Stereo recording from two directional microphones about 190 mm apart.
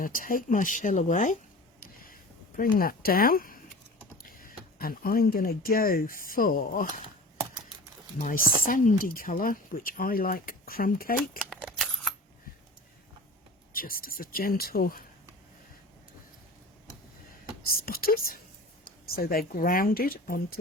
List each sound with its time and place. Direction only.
0.0 s speech: 45° left (ahead or behind)
1.8 s a sound: 50° left (ahead or behind)
2.6 s speech: 50° left (ahead or behind)
8.2 s speech: 45° left (ahead or behind)
11.4 s a sound: centre (ahead or behind)
13.7 s speech: 50° left (ahead or behind)
17.7 s speech: 50° left (ahead or behind)